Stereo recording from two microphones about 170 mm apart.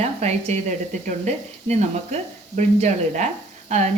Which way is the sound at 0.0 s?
40° right (ahead or behind).